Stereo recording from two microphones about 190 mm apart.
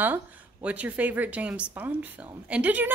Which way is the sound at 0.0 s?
10° right (ahead or behind).